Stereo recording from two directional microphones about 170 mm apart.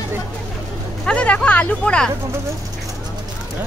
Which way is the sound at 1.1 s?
5° left (ahead or behind).